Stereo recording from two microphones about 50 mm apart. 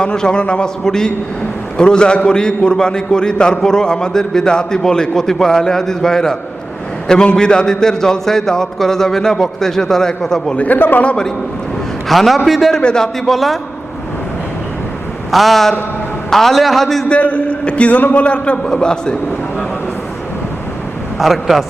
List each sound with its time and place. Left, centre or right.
0.0 s a man's voice: centre
10.6 s a man's voice: left
12.0 s a man's voice: centre
12.7 s a man's voice: centre
15.3 s a man's voice: centre
17.1 s a man's voice: left
21.2 s a man's voice: centre